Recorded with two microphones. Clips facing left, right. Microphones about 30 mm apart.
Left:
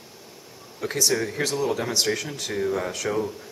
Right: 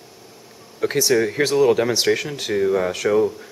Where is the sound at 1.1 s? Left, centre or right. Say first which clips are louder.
Right 7 dB; right.